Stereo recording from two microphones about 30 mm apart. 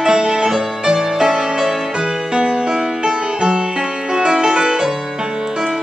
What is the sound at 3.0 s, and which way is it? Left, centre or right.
Music, right.